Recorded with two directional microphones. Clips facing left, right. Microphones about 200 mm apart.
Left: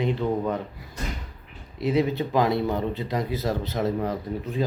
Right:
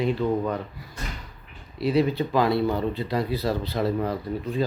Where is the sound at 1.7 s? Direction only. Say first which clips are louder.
Right 1 dB; 20° left (ahead or behind).